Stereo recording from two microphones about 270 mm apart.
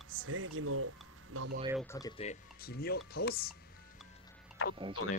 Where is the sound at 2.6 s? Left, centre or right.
Left.